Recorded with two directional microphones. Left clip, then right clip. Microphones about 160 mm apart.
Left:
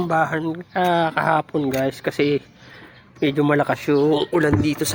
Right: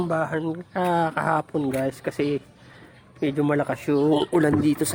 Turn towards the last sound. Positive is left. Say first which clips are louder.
# left 1 dB
turn(degrees=-15)  # may be behind; listen again after turning